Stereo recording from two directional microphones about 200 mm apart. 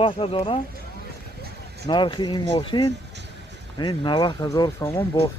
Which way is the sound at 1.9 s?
25° left (ahead or behind).